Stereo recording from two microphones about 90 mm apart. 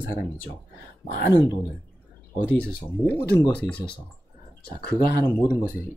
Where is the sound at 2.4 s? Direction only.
20° left (ahead or behind).